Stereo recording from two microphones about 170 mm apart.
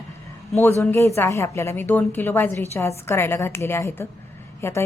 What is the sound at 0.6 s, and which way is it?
A woman's voice, 15° left (ahead or behind).